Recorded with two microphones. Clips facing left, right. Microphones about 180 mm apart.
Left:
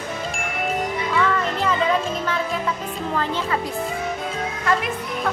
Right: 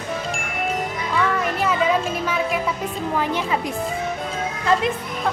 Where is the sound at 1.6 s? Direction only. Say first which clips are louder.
Right 2 dB; 10° right (ahead or behind).